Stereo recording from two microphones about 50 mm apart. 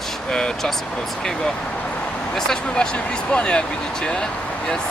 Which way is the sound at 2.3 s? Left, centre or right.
Centre.